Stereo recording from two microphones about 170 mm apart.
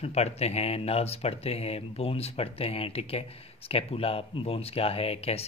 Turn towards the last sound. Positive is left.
turn(degrees=35)  # may be behind; listen again after turning